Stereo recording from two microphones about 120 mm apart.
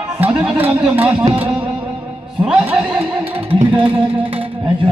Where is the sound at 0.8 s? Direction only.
15° right (ahead or behind).